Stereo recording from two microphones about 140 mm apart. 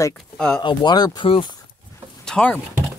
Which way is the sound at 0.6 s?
30° left (ahead or behind).